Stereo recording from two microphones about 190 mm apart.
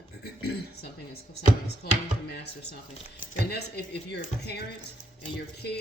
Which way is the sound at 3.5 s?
60° left (ahead or behind).